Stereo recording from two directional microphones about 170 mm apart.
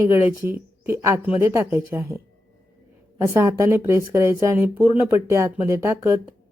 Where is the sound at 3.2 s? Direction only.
15° right (ahead or behind).